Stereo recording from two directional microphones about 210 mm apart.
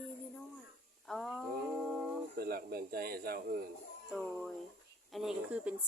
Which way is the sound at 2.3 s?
45° right (ahead or behind).